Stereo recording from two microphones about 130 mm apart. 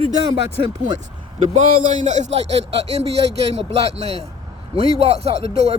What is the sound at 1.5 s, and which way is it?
A man's voice, 65° right (ahead or behind).